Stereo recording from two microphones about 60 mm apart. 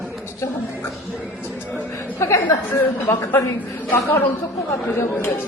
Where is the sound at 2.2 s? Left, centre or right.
Left.